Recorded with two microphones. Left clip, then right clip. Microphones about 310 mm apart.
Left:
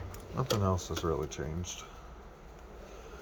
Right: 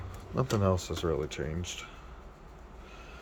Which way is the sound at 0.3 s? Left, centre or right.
Centre.